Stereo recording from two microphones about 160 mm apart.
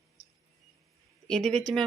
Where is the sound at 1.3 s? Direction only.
5° left (ahead or behind).